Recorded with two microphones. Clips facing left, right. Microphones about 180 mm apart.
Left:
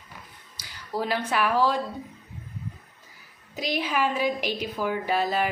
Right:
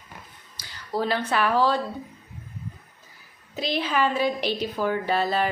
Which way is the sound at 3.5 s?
15° left (ahead or behind).